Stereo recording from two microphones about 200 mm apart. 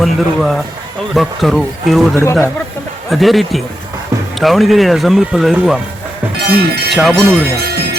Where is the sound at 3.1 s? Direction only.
Centre (ahead or behind).